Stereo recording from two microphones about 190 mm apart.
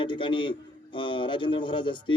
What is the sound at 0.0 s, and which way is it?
A man's voice, 25° left (ahead or behind).